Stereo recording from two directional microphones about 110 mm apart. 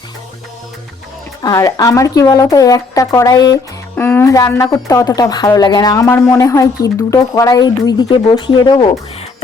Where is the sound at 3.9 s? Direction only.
20° left (ahead or behind); by 8.9 s 40° left (ahead or behind).